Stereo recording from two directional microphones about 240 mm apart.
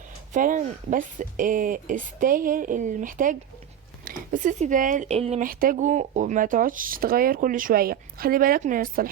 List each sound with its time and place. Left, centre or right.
0.3 s speech: right